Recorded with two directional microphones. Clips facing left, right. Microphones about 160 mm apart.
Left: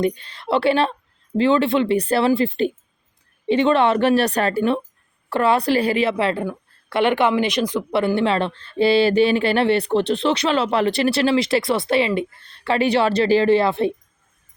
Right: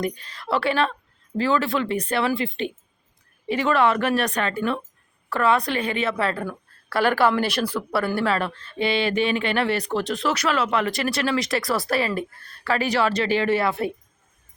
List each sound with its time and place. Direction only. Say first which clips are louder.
0.0 s speech: left 6 dB; 30° left (ahead or behind)
3.4 s speech: left 4 dB; 25° left (ahead or behind)